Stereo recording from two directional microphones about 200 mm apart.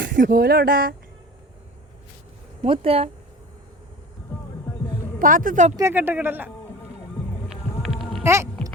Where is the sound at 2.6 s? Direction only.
30° right (ahead or behind).